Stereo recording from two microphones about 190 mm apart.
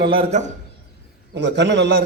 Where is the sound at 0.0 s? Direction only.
30° right (ahead or behind).